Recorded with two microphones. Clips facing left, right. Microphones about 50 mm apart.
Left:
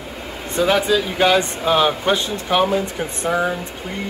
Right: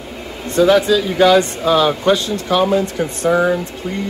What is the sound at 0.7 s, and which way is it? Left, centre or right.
Speech, centre.